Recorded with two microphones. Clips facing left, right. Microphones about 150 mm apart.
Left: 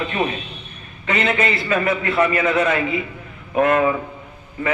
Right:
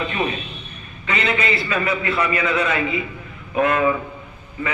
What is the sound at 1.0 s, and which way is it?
A man's voice, 50° left (ahead or behind).